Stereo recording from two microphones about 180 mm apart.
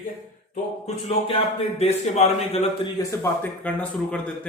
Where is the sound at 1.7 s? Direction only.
35° left (ahead or behind).